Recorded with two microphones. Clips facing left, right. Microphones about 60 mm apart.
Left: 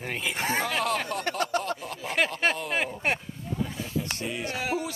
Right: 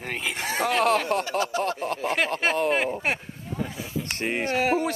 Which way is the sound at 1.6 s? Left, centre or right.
Right.